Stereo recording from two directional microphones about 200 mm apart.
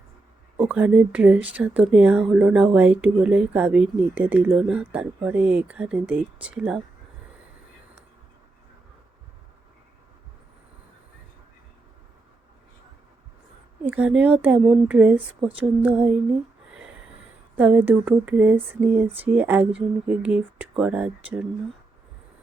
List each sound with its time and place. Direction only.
0.5 s speech: 5° right (ahead or behind)
13.8 s speech: 5° right (ahead or behind)
17.6 s speech: 10° right (ahead or behind)
19.0 s a sound: 30° right (ahead or behind)
19.3 s speech: 10° right (ahead or behind)